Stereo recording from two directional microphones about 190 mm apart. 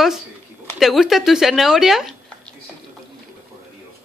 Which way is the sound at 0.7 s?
Centre (ahead or behind).